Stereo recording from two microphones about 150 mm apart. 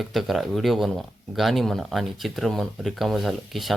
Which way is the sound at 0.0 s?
Centre (ahead or behind).